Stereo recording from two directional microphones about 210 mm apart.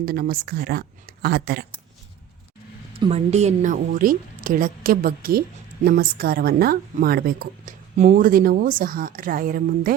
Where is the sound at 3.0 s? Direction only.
30° right (ahead or behind).